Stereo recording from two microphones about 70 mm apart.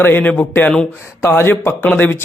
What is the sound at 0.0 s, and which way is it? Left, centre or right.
Speech, left.